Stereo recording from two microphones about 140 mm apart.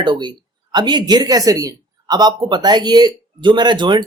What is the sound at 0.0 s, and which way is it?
Speech, 35° right (ahead or behind).